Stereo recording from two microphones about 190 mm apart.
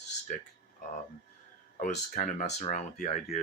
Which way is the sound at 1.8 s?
40° left (ahead or behind).